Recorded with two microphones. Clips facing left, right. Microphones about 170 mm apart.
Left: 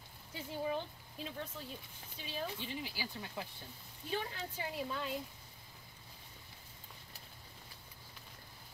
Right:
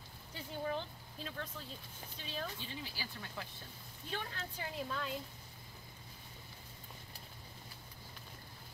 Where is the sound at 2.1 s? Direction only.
5° left (ahead or behind).